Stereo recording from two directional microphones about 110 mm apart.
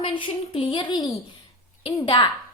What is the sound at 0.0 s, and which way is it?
A woman's voice, 50° left (ahead or behind).